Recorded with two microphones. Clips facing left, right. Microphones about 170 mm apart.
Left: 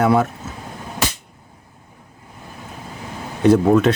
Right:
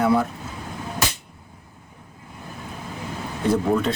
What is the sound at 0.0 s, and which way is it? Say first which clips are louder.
Speech: left 3 dB; 75° left (ahead or behind).